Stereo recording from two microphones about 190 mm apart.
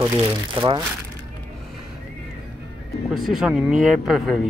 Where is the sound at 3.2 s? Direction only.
Centre (ahead or behind).